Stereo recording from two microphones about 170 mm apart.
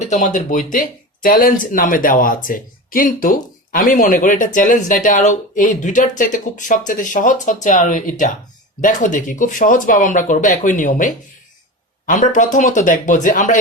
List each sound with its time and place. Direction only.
0.0 s speech: 45° left (ahead or behind)